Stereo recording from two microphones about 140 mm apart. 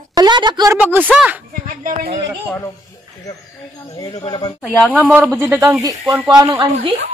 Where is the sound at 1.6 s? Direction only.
75° right (ahead or behind).